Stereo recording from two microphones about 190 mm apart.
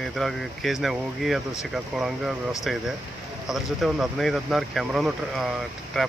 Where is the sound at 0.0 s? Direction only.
Centre (ahead or behind).